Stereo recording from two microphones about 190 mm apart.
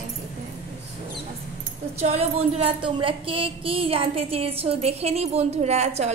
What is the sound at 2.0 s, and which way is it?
Speech, 35° right (ahead or behind).